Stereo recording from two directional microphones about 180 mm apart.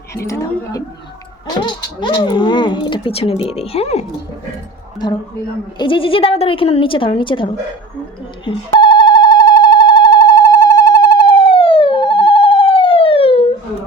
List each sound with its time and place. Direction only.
0.3 s a woman's voice: 20° left (ahead or behind); by 4.0 s 35° left (ahead or behind)
5.8 s a woman's voice: 30° left (ahead or behind)
8.4 s telephone: 25° left (ahead or behind)